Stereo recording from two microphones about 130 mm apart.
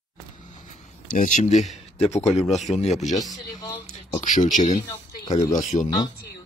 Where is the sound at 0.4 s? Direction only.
70° left (ahead or behind).